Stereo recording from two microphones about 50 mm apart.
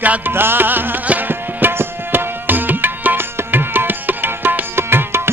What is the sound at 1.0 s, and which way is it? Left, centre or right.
Tabla, right.